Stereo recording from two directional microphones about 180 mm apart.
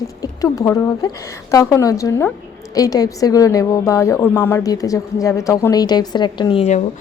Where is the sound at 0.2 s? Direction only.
20° left (ahead or behind).